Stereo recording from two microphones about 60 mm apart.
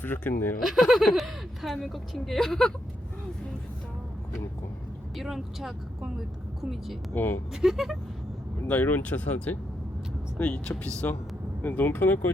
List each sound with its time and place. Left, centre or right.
0.0 s speech: left
0.6 s speech: centre
5.1 s speech: centre
7.1 s speech: left
7.5 s speech: centre
8.6 s speech: left